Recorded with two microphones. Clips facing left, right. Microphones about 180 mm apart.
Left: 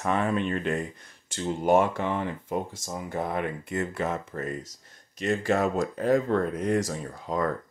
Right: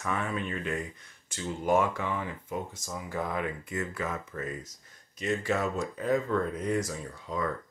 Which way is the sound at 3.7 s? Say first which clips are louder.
Left 6 dB; 30° left (ahead or behind).